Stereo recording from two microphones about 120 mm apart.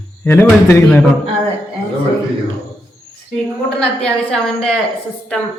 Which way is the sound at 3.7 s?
10° left (ahead or behind).